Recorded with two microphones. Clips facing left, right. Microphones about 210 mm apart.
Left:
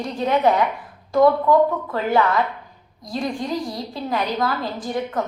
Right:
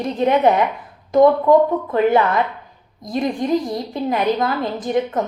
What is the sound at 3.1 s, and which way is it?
A woman's voice, 20° right (ahead or behind).